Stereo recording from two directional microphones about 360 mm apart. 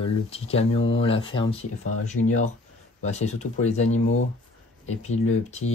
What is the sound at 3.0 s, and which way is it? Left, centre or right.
Speech, centre.